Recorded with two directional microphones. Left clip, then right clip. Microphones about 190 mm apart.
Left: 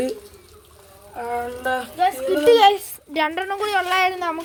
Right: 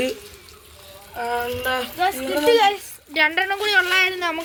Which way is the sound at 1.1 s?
40° left (ahead or behind).